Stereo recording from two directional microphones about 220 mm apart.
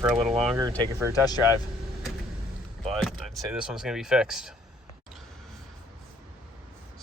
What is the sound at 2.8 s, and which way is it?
Speech, centre (ahead or behind).